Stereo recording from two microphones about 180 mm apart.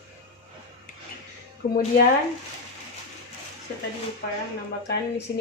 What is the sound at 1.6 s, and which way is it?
Speech, 50° left (ahead or behind).